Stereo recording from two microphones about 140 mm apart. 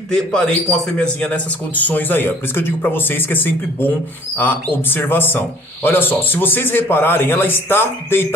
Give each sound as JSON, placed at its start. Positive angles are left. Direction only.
{"t": 0.1, "sound": "speech", "side_deg": 5}